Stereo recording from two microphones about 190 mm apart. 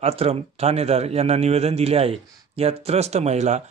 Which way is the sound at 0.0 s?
30° right (ahead or behind).